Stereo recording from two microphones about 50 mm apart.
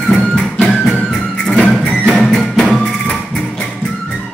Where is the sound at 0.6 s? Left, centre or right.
Centre.